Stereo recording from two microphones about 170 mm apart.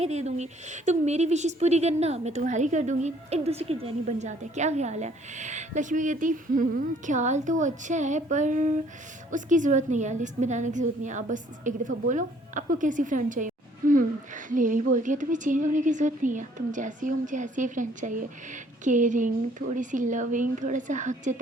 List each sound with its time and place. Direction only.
0.0 s a woman's voice: 40° right (ahead or behind)